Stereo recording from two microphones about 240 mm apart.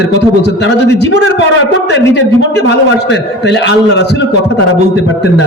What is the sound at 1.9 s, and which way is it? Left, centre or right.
A man's voice, left.